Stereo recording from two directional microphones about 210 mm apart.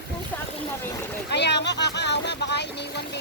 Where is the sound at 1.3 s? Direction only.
55° left (ahead or behind).